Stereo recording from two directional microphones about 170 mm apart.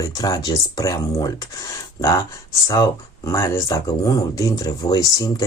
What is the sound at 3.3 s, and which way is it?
Speech, 15° left (ahead or behind).